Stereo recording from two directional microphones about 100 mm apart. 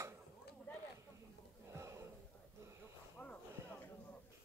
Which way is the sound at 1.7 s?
30° right (ahead or behind).